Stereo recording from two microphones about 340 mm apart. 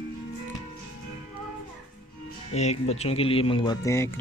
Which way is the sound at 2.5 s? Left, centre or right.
Centre.